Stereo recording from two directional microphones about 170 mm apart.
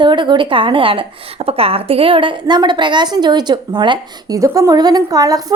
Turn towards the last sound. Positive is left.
turn(degrees=-20)  # may be behind; listen again after turning